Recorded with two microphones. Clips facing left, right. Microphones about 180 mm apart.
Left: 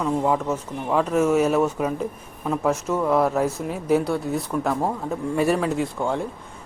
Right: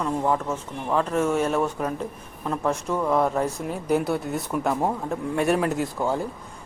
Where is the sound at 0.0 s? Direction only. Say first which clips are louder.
Left 2 dB; 5° left (ahead or behind).